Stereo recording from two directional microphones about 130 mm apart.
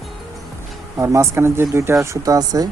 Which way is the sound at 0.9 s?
25° right (ahead or behind).